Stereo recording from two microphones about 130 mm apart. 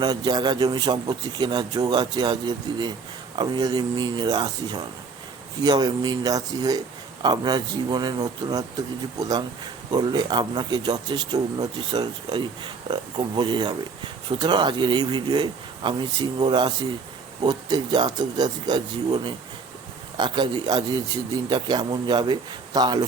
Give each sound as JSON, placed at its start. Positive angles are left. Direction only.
{"t": 0.0, "sound": "speech", "side_deg": -35}
{"t": 9.9, "sound": "speech", "side_deg": -35}